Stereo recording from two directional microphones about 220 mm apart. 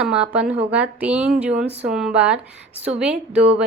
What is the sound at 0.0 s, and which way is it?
A woman's voice, 5° right (ahead or behind).